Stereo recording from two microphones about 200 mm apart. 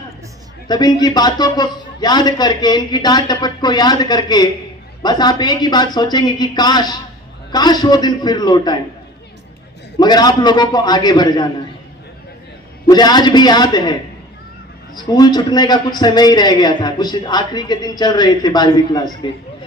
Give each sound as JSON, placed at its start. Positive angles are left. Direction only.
{"t": 0.7, "sound": "a man's voice", "side_deg": 20}
{"t": 10.0, "sound": "a man's voice", "side_deg": 20}
{"t": 12.9, "sound": "a man's voice", "side_deg": 20}
{"t": 14.9, "sound": "a man's voice", "side_deg": 20}